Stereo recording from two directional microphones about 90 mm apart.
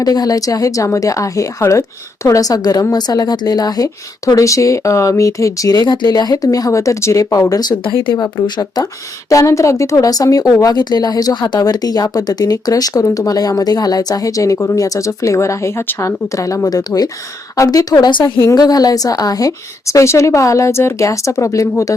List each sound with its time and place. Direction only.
0.0 s speech: 45° left (ahead or behind)
9.3 s speech: 35° left (ahead or behind)
18.1 s a woman's voice: 60° left (ahead or behind)
18.5 s speech: 45° left (ahead or behind)